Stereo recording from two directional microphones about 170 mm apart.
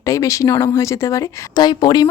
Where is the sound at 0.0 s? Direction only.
20° left (ahead or behind).